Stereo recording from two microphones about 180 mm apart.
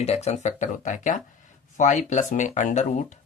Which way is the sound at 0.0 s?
35° left (ahead or behind).